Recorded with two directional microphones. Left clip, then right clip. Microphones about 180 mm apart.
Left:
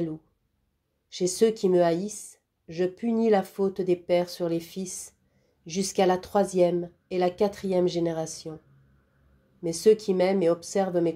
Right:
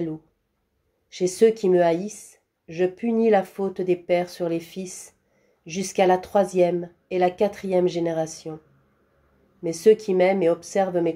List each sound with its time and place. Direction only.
1.1 s speech: 35° left (ahead or behind)
9.7 s speech: 30° left (ahead or behind)